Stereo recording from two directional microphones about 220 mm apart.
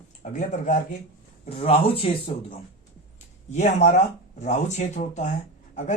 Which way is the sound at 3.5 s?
35° left (ahead or behind).